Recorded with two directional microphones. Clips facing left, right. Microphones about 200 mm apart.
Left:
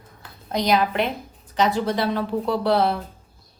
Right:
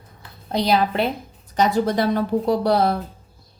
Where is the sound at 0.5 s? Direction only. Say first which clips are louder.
Right 1 dB; 30° right (ahead or behind).